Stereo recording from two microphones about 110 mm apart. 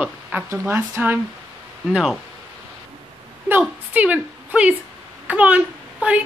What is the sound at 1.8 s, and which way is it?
Speech, 5° right (ahead or behind).